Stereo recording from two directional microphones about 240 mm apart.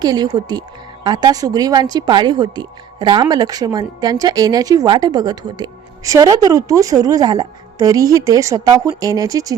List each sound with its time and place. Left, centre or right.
0.0 s a woman's voice: centre